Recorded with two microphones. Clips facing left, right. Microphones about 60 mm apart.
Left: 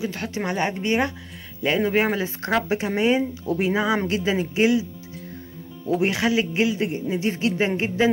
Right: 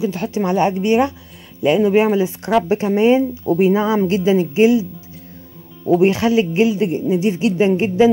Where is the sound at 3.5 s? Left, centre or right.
Right.